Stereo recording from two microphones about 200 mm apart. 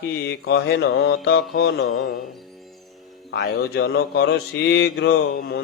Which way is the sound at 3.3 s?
60° left (ahead or behind).